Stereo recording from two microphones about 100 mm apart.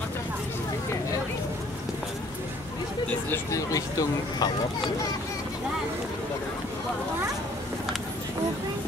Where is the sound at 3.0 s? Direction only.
20° left (ahead or behind).